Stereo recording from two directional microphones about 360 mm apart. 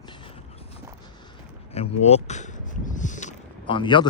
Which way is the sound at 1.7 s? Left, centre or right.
Centre.